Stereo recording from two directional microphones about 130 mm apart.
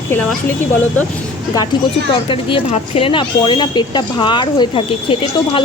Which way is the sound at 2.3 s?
40° left (ahead or behind).